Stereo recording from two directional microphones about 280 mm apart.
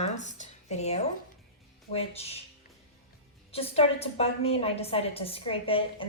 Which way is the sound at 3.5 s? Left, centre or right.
Left.